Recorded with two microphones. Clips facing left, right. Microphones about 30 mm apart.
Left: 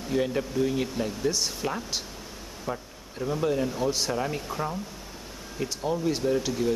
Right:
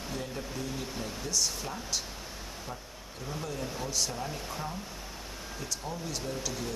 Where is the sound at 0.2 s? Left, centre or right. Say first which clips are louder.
Left 11 dB; left.